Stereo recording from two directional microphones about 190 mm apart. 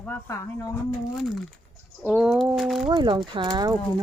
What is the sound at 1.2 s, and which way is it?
Speech, centre (ahead or behind).